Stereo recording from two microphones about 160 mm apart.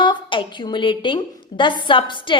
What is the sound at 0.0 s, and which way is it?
A woman's voice, 30° left (ahead or behind).